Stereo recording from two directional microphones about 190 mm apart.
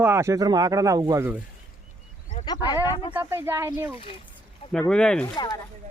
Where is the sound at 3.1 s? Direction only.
10° right (ahead or behind).